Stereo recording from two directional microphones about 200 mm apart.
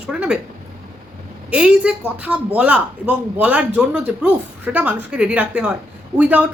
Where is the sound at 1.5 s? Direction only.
5° right (ahead or behind).